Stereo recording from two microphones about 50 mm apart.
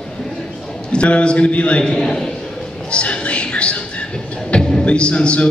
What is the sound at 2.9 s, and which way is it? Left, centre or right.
A man's voice, left.